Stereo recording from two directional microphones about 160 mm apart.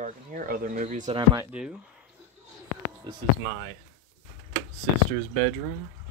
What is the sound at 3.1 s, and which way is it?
Speech, 25° right (ahead or behind).